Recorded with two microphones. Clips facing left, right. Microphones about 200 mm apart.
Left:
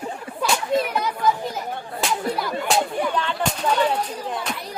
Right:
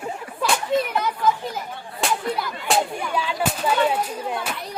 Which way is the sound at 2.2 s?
45° left (ahead or behind).